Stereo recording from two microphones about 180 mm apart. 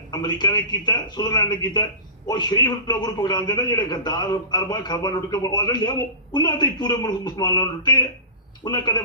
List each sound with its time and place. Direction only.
0.1 s a man's voice: 25° left (ahead or behind)